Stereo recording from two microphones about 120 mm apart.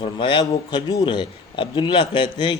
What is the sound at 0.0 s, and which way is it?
A man's voice, 45° left (ahead or behind).